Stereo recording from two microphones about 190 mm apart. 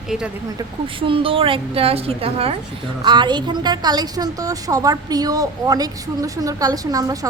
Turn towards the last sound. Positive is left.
turn(degrees=-20)  # may be behind; listen again after turning